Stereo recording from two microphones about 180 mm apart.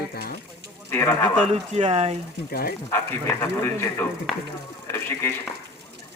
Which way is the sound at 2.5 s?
60° left (ahead or behind).